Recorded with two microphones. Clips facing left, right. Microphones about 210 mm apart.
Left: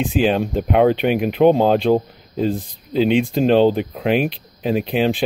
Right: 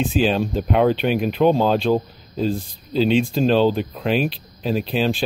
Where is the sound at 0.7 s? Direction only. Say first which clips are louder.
Left 3 dB; 60° left (ahead or behind).